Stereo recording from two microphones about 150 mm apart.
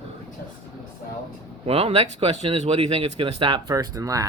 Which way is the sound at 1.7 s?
40° right (ahead or behind).